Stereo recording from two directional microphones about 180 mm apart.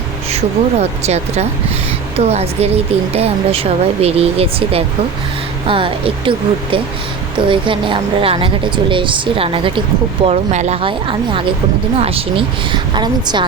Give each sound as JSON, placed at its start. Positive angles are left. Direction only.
{"t": 0.3, "sound": "speech", "side_deg": -35}